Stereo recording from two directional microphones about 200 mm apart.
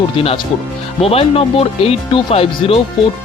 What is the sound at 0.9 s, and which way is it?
Speech, 30° left (ahead or behind).